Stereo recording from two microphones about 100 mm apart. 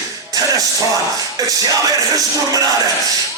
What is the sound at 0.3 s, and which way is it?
Music, 35° right (ahead or behind).